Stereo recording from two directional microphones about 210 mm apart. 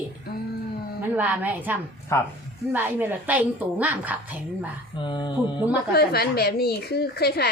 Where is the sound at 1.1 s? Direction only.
10° right (ahead or behind).